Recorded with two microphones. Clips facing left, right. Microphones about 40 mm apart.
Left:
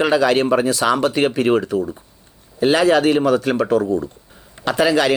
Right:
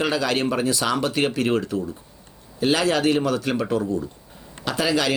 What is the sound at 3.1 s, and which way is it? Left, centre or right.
A man's voice, centre.